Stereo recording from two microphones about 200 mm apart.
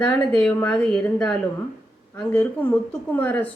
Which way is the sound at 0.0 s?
10° left (ahead or behind).